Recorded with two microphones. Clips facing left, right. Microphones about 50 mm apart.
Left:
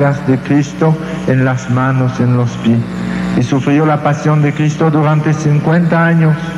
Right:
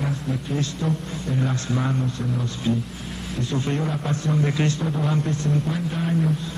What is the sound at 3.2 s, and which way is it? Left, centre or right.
Speech, left.